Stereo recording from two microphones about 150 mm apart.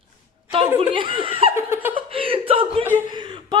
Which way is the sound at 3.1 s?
30° right (ahead or behind).